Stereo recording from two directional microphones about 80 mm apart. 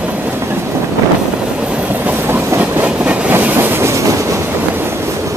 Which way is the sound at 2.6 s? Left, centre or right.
Centre.